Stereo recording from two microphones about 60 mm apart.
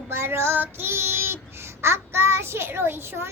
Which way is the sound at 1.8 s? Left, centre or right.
Right.